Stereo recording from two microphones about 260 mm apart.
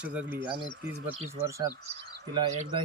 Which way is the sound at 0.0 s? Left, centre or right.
Centre.